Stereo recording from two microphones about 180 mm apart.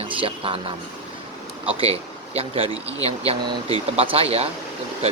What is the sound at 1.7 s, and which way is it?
Speech, 35° right (ahead or behind).